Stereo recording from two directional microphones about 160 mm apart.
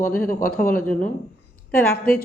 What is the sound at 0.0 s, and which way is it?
Speech, 60° left (ahead or behind).